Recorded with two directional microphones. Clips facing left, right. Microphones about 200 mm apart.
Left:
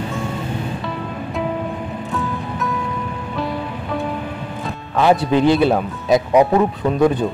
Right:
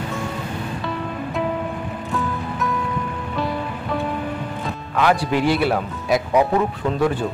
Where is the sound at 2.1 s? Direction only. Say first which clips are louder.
Even; centre (ahead or behind).